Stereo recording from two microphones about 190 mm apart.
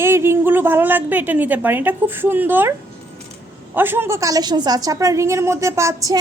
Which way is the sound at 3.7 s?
10° right (ahead or behind).